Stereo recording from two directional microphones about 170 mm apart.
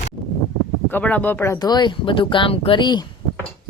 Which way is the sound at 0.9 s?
10° left (ahead or behind).